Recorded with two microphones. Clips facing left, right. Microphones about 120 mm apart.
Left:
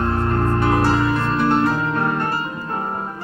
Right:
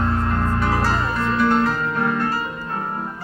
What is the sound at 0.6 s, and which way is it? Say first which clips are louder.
Music: left 6 dB; 20° left (ahead or behind).